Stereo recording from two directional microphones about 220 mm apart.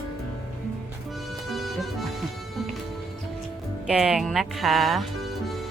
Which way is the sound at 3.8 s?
5° right (ahead or behind).